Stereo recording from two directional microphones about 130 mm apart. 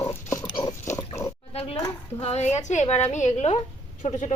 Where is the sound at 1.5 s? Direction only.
50° left (ahead or behind).